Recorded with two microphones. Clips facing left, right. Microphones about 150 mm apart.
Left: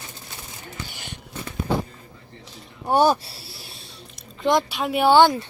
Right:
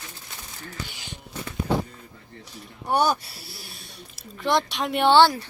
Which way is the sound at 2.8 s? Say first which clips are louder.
Left 4 dB; 25° left (ahead or behind).